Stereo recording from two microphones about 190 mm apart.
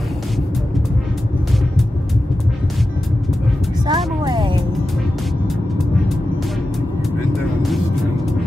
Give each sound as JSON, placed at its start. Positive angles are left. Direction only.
{"t": 3.8, "sound": "music", "side_deg": -20}